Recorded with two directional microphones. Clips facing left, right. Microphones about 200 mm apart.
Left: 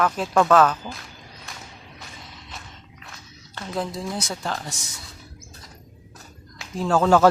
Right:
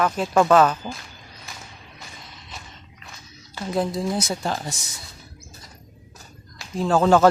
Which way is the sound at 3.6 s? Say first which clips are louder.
Right 5 dB; 10° right (ahead or behind).